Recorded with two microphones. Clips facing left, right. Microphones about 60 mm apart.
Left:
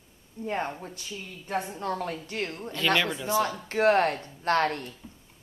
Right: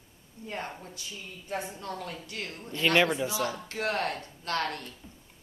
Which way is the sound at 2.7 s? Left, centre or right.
Right.